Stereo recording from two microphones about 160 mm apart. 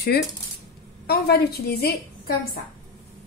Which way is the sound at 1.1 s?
80° left.